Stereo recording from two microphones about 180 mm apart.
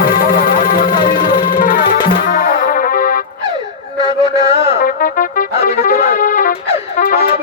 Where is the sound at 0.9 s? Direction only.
25° left (ahead or behind).